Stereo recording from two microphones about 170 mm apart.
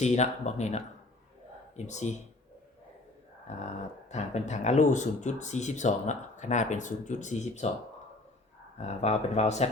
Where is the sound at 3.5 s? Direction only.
40° left (ahead or behind).